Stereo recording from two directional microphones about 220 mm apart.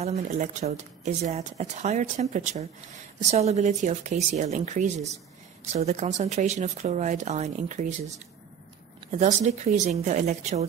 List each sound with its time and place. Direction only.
0.0 s speech: 30° right (ahead or behind)
9.1 s speech: 30° right (ahead or behind)